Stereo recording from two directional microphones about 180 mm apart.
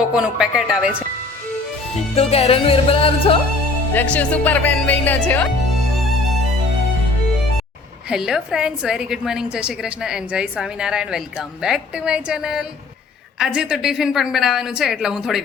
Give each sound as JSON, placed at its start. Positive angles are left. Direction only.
{"t": 0.1, "sound": "speech", "side_deg": -5}
{"t": 2.1, "sound": "speech", "side_deg": 35}
{"t": 3.9, "sound": "speech", "side_deg": 10}
{"t": 8.1, "sound": "a woman's voice", "side_deg": 0}